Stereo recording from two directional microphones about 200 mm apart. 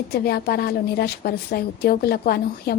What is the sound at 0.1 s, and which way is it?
A woman's voice, 50° left (ahead or behind).